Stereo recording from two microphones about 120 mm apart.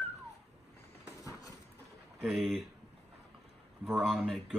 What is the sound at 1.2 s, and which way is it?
Clip-clop, 30° left (ahead or behind).